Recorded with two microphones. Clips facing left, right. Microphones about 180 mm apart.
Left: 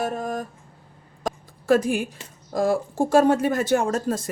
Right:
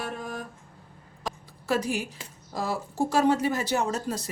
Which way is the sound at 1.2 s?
50° left (ahead or behind).